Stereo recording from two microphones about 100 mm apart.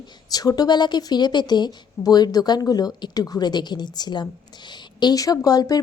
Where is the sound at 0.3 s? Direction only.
40° left (ahead or behind).